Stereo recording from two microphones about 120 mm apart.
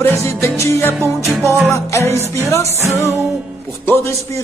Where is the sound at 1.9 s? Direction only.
25° left (ahead or behind).